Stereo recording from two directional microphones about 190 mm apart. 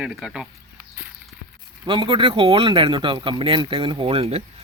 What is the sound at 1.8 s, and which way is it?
Speech, 25° right (ahead or behind).